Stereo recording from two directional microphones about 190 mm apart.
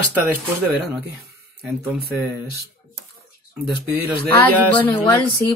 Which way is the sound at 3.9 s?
55° right (ahead or behind).